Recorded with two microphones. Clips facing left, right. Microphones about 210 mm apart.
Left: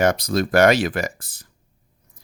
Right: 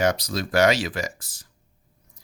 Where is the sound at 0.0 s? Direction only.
55° left (ahead or behind).